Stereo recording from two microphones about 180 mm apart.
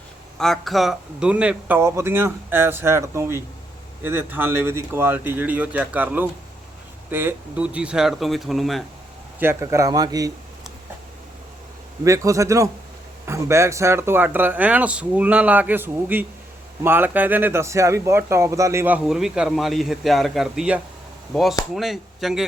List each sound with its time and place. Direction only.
0.3 s speech: centre (ahead or behind)
9.4 s speech: 15° right (ahead or behind)
12.0 s speech: 15° right (ahead or behind); by 22.4 s centre (ahead or behind)